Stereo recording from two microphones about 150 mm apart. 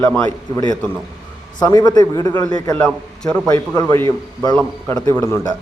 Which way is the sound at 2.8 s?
5° left (ahead or behind).